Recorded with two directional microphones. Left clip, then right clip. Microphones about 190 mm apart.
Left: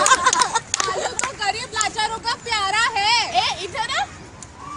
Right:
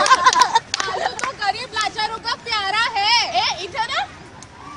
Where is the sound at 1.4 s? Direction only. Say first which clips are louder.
Right 1 dB; 15° right (ahead or behind).